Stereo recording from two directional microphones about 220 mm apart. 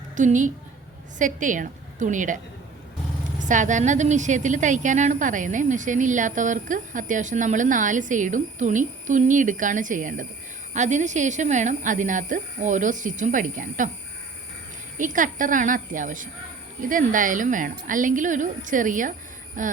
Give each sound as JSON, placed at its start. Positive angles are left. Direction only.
{"t": 0.2, "sound": "a woman's voice", "side_deg": -35}
{"t": 14.9, "sound": "a woman's voice", "side_deg": -35}